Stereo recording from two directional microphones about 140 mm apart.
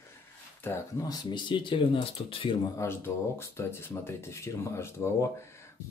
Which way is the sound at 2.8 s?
15° left (ahead or behind).